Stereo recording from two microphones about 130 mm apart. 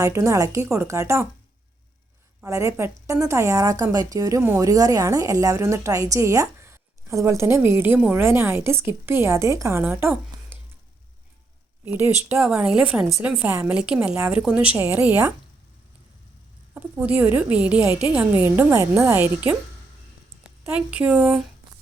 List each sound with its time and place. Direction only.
0.0 s a woman's voice: 25° right (ahead or behind)
2.4 s a woman's voice: 25° right (ahead or behind)
11.9 s speech: 15° right (ahead or behind)
16.7 s speech: 10° right (ahead or behind)
20.7 s speech: 10° right (ahead or behind)